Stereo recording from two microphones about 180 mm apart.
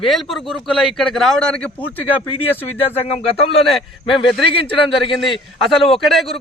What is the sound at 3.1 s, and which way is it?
Speech, 35° left (ahead or behind).